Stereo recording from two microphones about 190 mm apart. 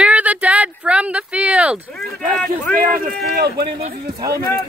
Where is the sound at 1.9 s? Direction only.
5° left (ahead or behind).